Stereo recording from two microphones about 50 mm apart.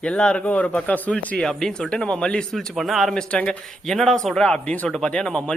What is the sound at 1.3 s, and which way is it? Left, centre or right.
A man's voice, centre.